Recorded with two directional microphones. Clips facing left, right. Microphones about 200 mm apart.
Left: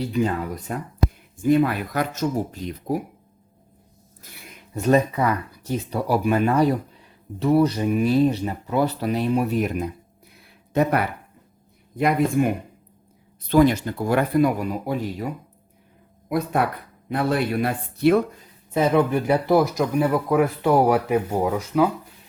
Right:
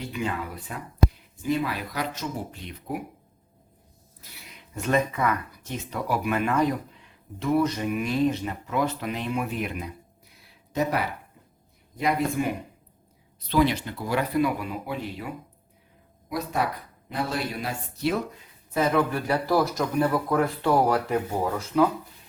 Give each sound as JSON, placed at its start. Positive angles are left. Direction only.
{"t": 0.0, "sound": "speech", "side_deg": 35}
{"t": 4.2, "sound": "speech", "side_deg": 45}
{"t": 10.7, "sound": "speech", "side_deg": 55}
{"t": 16.3, "sound": "speech", "side_deg": 55}
{"t": 19.5, "sound": "speech", "side_deg": 20}
{"t": 19.8, "sound": "speech", "side_deg": 10}